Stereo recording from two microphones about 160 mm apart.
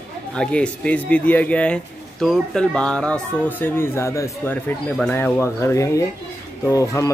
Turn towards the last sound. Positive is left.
turn(degrees=20)  # may be behind; listen again after turning